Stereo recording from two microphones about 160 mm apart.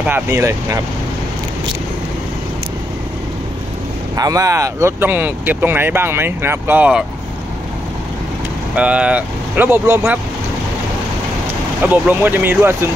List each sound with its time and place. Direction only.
0.1 s speech: 15° right (ahead or behind)
4.2 s speech: 20° right (ahead or behind)
8.7 s speech: 10° right (ahead or behind)
11.8 s speech: 10° right (ahead or behind)